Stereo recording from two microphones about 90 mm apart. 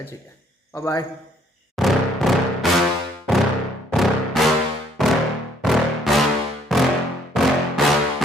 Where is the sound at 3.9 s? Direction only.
Centre (ahead or behind).